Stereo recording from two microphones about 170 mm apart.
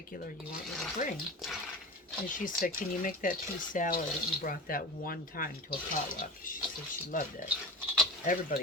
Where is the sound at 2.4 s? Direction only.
50° left (ahead or behind).